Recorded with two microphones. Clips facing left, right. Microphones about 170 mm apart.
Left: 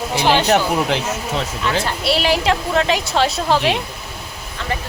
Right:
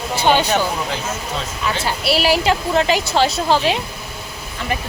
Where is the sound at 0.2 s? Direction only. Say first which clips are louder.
Left 1 dB; 80° left.